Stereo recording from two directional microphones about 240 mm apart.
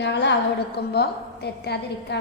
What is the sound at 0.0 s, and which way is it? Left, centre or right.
A woman's voice, left.